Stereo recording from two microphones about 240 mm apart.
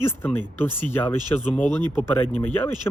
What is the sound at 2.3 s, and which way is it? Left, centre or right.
Speech, centre.